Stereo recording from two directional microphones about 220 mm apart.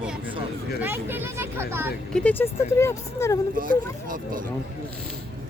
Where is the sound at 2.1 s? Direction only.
5° left (ahead or behind).